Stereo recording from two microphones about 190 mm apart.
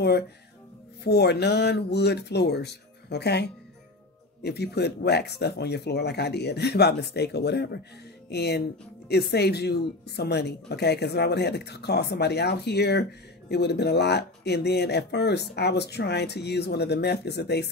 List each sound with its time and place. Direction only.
1.0 s speech: 60° left (ahead or behind)